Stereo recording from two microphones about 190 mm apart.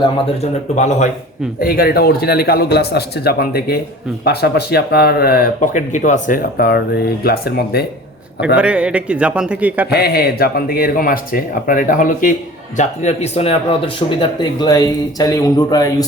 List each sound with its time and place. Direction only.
0.8 s speech: 40° left (ahead or behind)
1.6 s speech: 50° left (ahead or behind)
8.5 s a man's voice: 5° right (ahead or behind)
9.9 s speech: 55° left (ahead or behind); by 16.0 s 20° left (ahead or behind)